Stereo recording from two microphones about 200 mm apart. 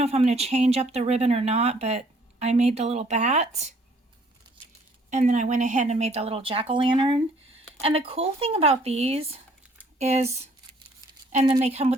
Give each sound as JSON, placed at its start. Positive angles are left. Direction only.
{"t": 0.0, "sound": "speech", "side_deg": -30}
{"t": 5.1, "sound": "speech", "side_deg": -35}
{"t": 11.3, "sound": "a woman's voice", "side_deg": -35}